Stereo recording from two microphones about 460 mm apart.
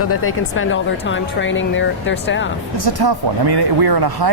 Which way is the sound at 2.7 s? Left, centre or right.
Right.